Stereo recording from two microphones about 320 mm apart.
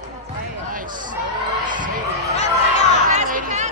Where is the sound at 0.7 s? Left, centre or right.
Right.